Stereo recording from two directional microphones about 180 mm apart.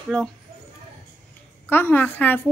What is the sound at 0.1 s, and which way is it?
Speech, 5° left (ahead or behind).